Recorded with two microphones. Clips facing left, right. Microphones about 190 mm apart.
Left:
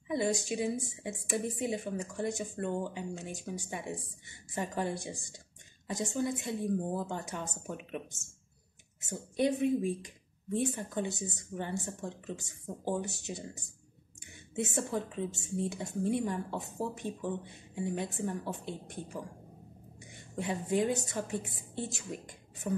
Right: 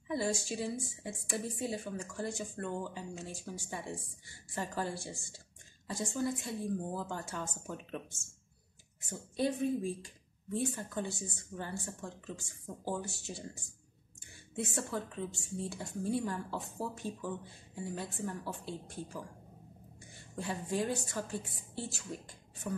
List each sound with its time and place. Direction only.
0.1 s a woman's voice: 20° left (ahead or behind)